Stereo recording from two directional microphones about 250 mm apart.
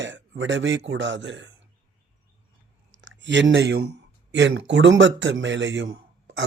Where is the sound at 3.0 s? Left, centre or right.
Right.